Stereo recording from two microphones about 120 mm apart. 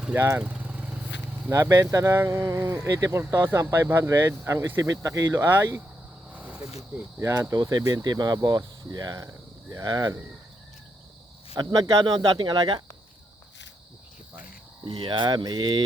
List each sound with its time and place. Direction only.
0.0 s vehicle: 15° right (ahead or behind)
1.5 s speech: 25° right (ahead or behind)
6.3 s a sound: 10° right (ahead or behind)
7.2 s speech: 25° right (ahead or behind)
11.5 s speech: 30° right (ahead or behind)
14.8 s speech: 45° right (ahead or behind)